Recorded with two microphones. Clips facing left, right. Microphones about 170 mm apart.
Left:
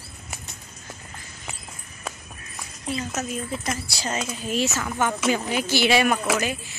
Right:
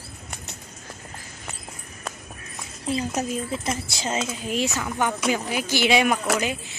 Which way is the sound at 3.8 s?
25° right (ahead or behind).